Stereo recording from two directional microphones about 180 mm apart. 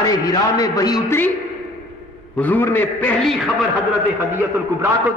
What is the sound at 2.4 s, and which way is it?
A man's voice, 10° left (ahead or behind).